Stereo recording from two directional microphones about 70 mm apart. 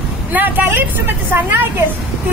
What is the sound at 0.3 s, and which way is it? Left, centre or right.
Speech, right.